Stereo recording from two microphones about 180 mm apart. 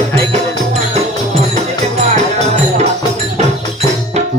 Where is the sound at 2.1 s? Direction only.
35° right (ahead or behind).